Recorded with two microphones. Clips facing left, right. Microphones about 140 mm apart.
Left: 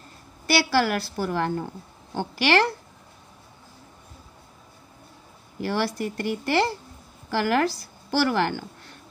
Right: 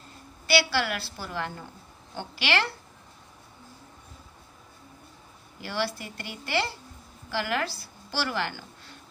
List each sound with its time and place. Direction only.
0.5 s speech: 45° left (ahead or behind)
5.6 s a woman's voice: 45° left (ahead or behind)